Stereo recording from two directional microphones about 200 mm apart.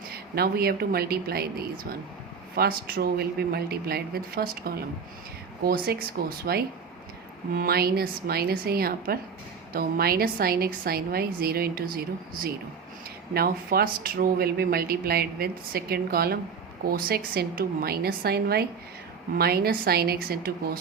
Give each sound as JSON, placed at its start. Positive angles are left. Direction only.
{"t": 0.1, "sound": "speech", "side_deg": -50}